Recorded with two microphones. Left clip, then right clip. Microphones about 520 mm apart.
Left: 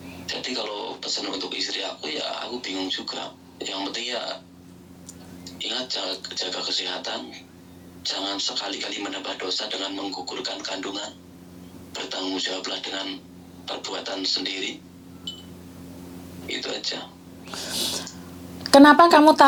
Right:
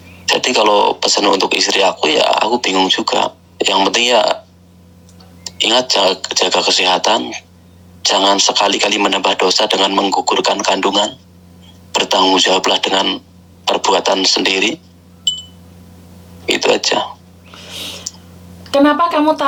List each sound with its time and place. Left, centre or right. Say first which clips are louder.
0.3 s speech: right 18 dB; right
5.5 s speech: right 16 dB; right
16.5 s speech: right 16 dB; right
18.1 s clicking: right 11 dB; right